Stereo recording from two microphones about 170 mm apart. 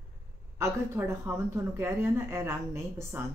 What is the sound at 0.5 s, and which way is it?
Speech, 15° right (ahead or behind).